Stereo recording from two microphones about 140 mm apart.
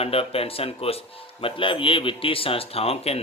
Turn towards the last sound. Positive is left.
turn(degrees=45)  # may be behind; listen again after turning